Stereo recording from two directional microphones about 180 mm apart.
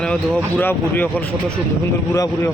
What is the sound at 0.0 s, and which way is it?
Speech, 5° left (ahead or behind).